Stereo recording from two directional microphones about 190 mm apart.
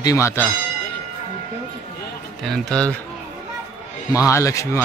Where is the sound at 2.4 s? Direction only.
Centre (ahead or behind).